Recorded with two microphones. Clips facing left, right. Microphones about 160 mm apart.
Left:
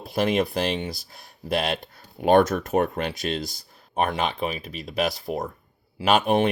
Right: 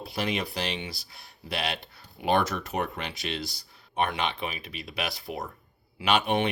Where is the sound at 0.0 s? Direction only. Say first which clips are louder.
Left 8 dB; 50° left (ahead or behind).